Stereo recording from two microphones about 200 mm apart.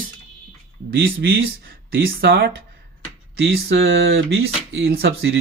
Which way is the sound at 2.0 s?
55° right (ahead or behind).